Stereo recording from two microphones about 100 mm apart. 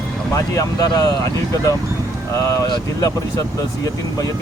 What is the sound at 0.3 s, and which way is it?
Speech, 35° left (ahead or behind).